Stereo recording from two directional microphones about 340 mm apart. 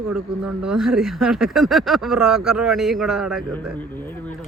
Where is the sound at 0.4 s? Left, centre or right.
Centre.